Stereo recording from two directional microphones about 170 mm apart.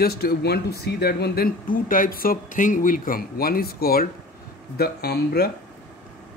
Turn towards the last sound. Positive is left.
turn(degrees=65)  # may be behind; listen again after turning